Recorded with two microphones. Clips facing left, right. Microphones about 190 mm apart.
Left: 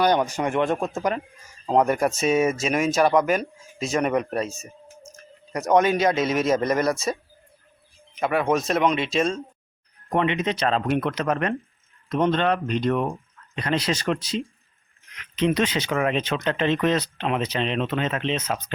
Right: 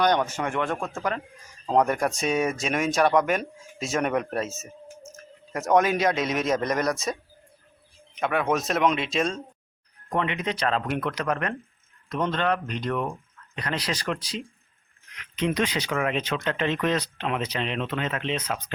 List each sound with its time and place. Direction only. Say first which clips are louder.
0.0 s speech: left 2 dB; 10° left (ahead or behind)
1.6 s speech: left 2 dB; 5° left (ahead or behind)
10.1 s speech: left 4 dB; 20° left (ahead or behind)